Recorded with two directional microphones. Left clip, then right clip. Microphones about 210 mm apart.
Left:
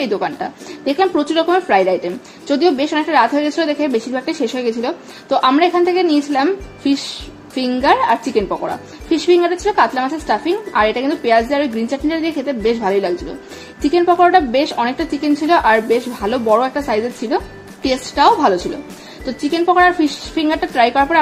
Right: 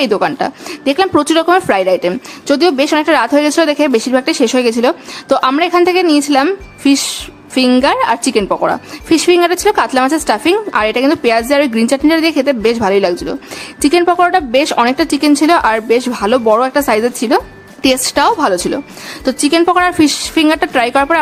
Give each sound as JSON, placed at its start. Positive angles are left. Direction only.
{"t": 0.0, "sound": "a woman's voice", "side_deg": -20}